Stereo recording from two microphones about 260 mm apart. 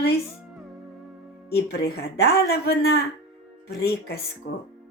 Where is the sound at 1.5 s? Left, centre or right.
Left.